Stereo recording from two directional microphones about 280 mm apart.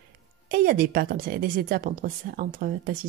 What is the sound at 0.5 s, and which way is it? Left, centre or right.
A woman's voice, right.